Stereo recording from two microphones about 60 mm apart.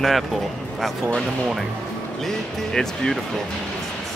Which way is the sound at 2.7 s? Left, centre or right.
Centre.